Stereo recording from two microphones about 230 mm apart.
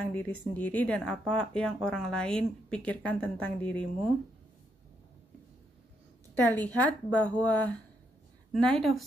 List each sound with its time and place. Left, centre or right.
0.0 s speech: centre
6.3 s speech: centre